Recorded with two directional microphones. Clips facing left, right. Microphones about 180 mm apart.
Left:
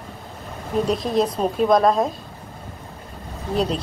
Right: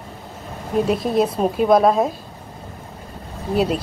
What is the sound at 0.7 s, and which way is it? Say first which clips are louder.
A woman's voice: right 2 dB; 5° right (ahead or behind).